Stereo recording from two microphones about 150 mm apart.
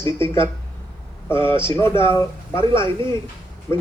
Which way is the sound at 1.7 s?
15° left (ahead or behind).